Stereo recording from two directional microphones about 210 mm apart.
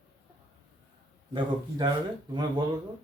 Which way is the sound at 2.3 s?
20° right (ahead or behind).